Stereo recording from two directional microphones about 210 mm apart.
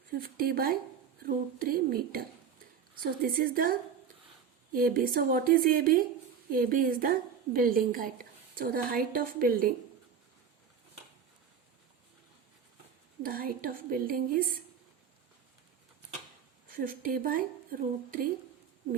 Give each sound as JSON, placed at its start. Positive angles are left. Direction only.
{"t": 0.1, "sound": "a woman's voice", "side_deg": -45}
{"t": 13.2, "sound": "a woman's voice", "side_deg": -45}
{"t": 16.7, "sound": "a woman's voice", "side_deg": -40}